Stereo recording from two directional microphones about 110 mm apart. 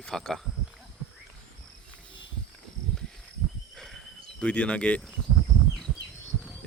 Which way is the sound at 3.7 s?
Centre (ahead or behind).